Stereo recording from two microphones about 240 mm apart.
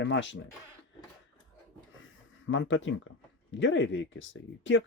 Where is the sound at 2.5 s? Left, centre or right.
Left.